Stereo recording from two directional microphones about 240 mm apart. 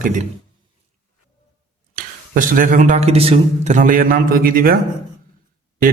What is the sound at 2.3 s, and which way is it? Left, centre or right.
A man's voice, right.